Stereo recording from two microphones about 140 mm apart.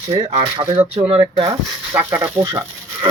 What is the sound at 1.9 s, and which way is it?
Speech, 15° right (ahead or behind).